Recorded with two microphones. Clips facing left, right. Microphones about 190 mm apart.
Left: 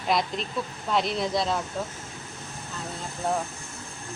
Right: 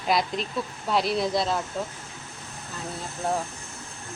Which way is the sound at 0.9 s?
5° right (ahead or behind).